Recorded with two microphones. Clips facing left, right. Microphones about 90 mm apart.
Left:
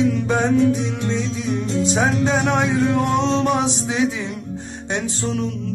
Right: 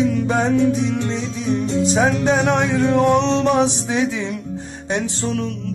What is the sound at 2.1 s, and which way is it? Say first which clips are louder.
Music: right 2 dB; 30° right (ahead or behind).